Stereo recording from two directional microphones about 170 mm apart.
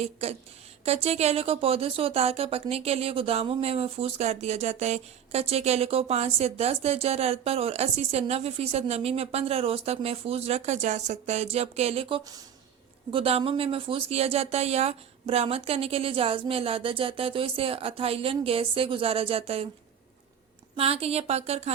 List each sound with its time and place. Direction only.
0.0 s speech: 40° right (ahead or behind)
20.7 s speech: 35° right (ahead or behind)